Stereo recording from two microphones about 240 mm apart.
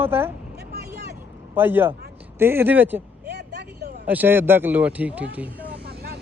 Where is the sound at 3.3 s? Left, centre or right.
Right.